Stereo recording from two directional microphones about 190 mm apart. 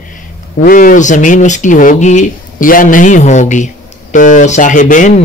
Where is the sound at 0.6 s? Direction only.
45° left (ahead or behind).